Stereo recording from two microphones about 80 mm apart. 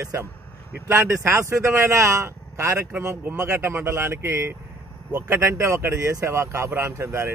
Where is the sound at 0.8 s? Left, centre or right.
Right.